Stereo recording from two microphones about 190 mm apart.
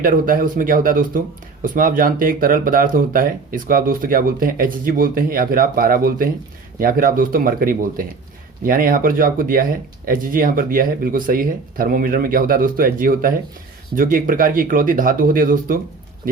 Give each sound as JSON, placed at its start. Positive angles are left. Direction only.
{"t": 0.0, "sound": "speech", "side_deg": -45}